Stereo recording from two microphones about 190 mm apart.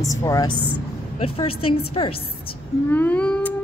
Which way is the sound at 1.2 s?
30° left (ahead or behind).